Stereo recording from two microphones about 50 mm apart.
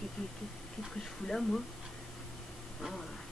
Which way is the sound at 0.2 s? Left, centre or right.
Centre.